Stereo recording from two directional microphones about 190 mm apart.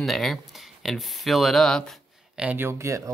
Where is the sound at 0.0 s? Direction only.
Centre (ahead or behind).